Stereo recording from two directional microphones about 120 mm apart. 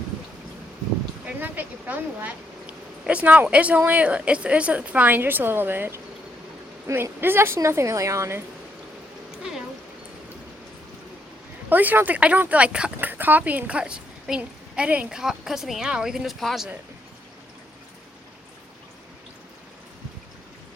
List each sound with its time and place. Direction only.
1.4 s a woman's voice: 15° right (ahead or behind)
11.7 s speech: 15° right (ahead or behind)